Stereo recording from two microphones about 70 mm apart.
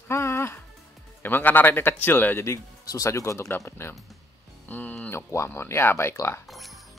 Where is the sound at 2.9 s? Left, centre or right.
Left.